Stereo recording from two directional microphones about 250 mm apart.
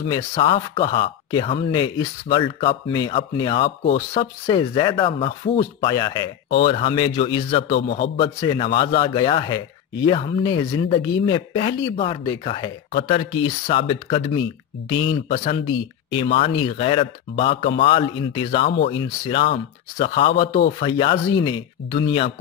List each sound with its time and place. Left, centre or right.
0.1 s a man's voice: centre
7.7 s a man's voice: left
8.2 s a man's voice: centre